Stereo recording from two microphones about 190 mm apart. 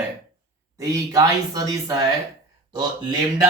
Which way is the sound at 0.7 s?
15° right (ahead or behind).